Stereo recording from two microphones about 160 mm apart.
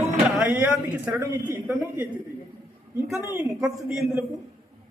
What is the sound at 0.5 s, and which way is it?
Speech, 10° right (ahead or behind).